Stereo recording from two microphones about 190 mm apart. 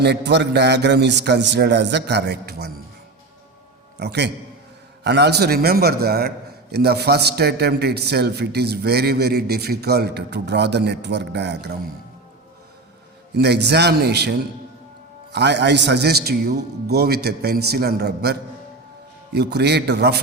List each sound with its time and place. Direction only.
0.0 s a man's voice: 65° right (ahead or behind)
3.9 s a man's voice: 60° right (ahead or behind)
13.3 s a man's voice: 60° right (ahead or behind)